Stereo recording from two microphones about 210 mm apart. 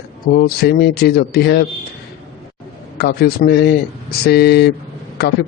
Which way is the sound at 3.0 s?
50° left (ahead or behind).